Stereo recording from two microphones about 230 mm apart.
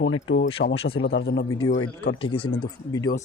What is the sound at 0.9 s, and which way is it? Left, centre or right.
Speech, left.